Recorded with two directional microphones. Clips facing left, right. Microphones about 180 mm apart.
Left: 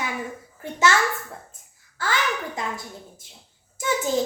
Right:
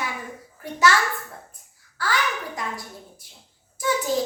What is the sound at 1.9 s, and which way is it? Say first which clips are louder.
Speech: even; 25° left (ahead or behind).